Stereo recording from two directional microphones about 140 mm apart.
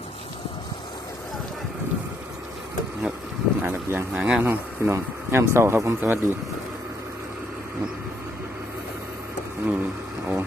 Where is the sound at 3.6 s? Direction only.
15° right (ahead or behind).